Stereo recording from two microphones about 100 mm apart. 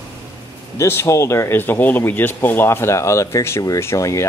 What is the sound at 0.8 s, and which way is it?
Speech, 25° left (ahead or behind).